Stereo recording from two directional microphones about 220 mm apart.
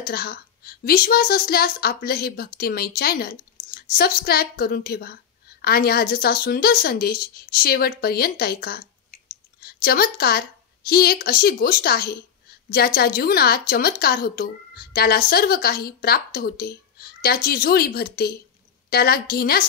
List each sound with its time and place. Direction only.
0.0 s a woman's voice: 45° left (ahead or behind)